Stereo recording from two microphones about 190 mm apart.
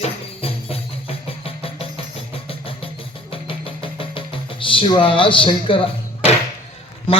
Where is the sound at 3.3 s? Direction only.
30° left (ahead or behind).